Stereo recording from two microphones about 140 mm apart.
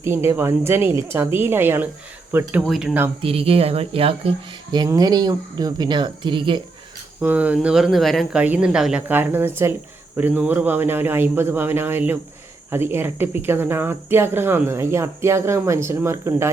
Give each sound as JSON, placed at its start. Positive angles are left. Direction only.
{"t": 0.0, "sound": "speech", "side_deg": -20}
{"t": 2.6, "sound": "speech", "side_deg": 0}
{"t": 3.2, "sound": "speech", "side_deg": -40}
{"t": 4.7, "sound": "speech", "side_deg": -30}
{"t": 7.2, "sound": "speech", "side_deg": -10}
{"t": 8.4, "sound": "speech", "side_deg": -10}